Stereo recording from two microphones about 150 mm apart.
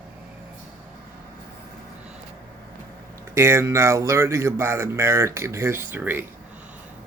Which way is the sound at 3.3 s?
20° right (ahead or behind).